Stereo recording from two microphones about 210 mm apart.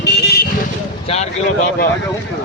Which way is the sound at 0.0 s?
50° left (ahead or behind).